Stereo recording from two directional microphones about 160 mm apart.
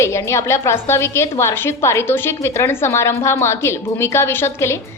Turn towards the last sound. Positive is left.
turn(degrees=15)  # may be behind; listen again after turning